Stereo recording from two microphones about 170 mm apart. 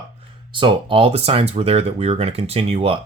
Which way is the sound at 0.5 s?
30° right (ahead or behind).